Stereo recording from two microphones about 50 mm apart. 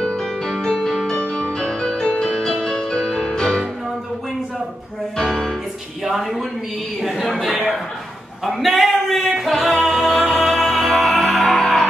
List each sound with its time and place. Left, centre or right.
0.6 s music: centre
6.0 s speech: centre
7.0 s a sound: centre
8.5 s music: centre
11.4 s music: centre